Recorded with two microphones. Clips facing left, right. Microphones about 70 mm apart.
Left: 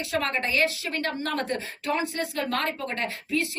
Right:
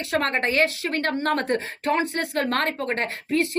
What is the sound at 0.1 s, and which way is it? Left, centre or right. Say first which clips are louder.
A woman's voice: right 4 dB; right.